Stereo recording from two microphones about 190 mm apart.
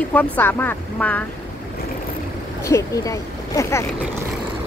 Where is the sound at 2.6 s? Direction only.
15° left (ahead or behind).